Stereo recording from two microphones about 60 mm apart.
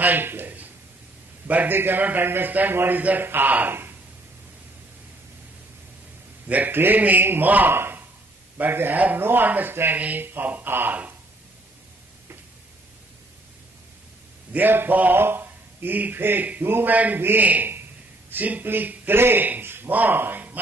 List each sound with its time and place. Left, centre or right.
0.0 s a man's voice: right
6.4 s speech: right
7.7 s a sound: right
8.5 s speech: right
14.5 s speech: right
16.9 s a man's voice: right